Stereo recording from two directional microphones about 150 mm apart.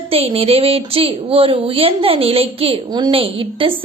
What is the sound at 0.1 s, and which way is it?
A woman's voice, 40° right (ahead or behind).